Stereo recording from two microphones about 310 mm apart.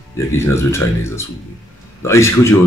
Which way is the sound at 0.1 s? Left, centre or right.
Centre.